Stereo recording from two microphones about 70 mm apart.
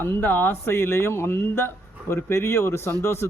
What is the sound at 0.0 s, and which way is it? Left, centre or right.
Speech, left.